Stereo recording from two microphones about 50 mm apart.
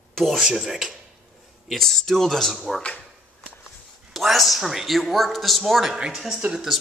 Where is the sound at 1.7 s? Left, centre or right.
Centre.